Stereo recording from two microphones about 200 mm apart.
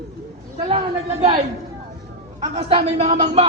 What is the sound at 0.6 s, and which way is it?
A woman's voice, 30° right (ahead or behind).